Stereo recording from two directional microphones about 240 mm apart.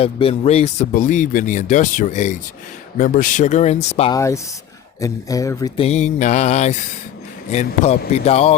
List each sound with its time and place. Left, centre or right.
0.0 s speech: left
3.0 s mantra: left
4.1 s speech: centre
4.9 s mantra: centre